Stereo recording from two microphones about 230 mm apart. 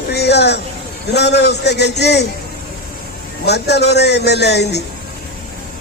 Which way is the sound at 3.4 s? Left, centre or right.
Left.